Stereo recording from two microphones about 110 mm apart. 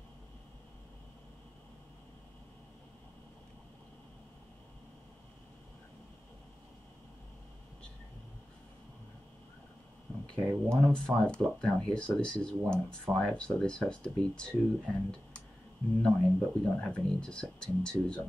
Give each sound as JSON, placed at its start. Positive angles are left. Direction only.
{"t": 10.3, "sound": "speech", "side_deg": 10}